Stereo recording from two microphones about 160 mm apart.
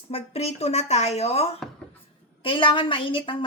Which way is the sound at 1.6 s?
5° left (ahead or behind).